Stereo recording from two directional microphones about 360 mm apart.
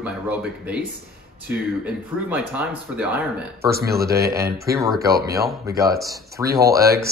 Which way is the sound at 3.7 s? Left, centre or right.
Right.